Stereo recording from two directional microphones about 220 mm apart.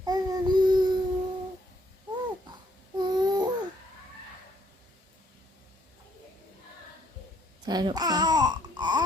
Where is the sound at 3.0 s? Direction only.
20° right (ahead or behind).